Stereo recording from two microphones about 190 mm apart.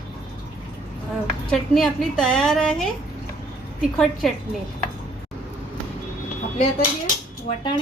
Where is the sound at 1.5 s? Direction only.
5° left (ahead or behind).